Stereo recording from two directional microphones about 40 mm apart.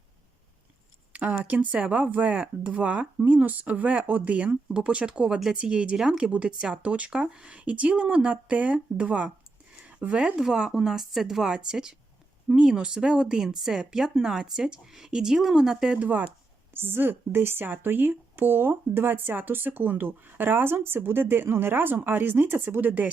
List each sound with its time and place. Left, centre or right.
1.1 s speech: right
3.2 s speech: right; by 16.0 s centre
16.0 s speech: right
16.7 s speech: right
17.7 s speech: right